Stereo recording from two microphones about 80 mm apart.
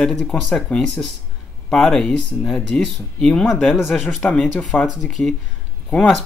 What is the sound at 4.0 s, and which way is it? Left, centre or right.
Speech, left.